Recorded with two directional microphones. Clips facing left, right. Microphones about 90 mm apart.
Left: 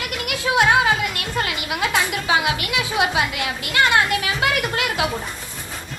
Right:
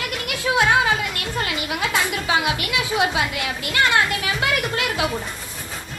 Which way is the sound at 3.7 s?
25° left (ahead or behind).